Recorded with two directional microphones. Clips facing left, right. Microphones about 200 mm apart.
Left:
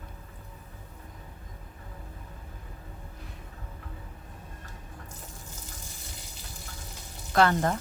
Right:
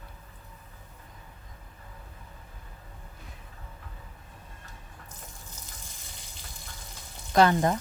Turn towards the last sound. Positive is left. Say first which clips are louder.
# right 2 dB
turn(degrees=-15)  # may be behind; listen again after turning